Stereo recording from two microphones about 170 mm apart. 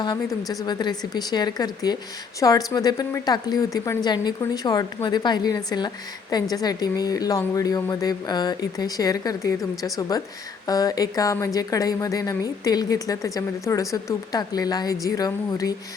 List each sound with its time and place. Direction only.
0.0 s speech: 25° left (ahead or behind)